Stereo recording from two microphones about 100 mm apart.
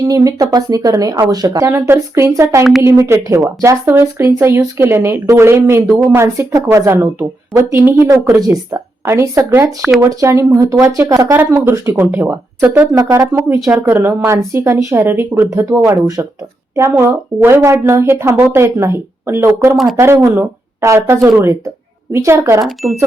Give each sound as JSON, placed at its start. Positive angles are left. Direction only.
{"t": 0.0, "sound": "a woman's voice", "side_deg": -35}
{"t": 8.0, "sound": "a woman's voice", "side_deg": -35}
{"t": 9.6, "sound": "speech", "side_deg": -5}
{"t": 10.1, "sound": "a woman's voice", "side_deg": -30}
{"t": 12.9, "sound": "speech", "side_deg": -35}
{"t": 13.6, "sound": "speech", "side_deg": -15}
{"t": 13.8, "sound": "a woman's voice", "side_deg": -25}
{"t": 19.7, "sound": "speech", "side_deg": 0}
{"t": 20.2, "sound": "a woman's voice", "side_deg": -25}
{"t": 22.6, "sound": "speech", "side_deg": 0}